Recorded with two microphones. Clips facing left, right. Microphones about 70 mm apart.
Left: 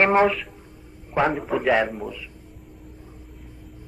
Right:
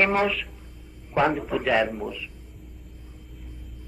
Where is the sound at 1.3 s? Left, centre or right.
Centre.